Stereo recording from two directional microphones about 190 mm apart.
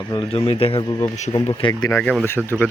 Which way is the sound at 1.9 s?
5° left (ahead or behind).